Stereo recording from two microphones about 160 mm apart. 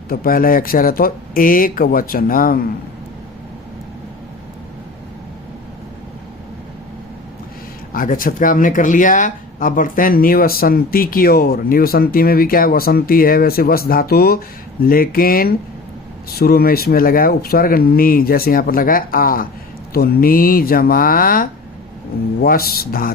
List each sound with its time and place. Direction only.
0.1 s speech: 65° left (ahead or behind)
7.9 s speech: 60° left (ahead or behind)